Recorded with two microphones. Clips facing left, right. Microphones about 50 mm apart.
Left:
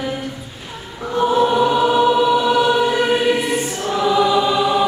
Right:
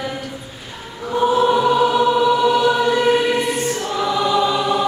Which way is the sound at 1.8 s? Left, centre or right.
Centre.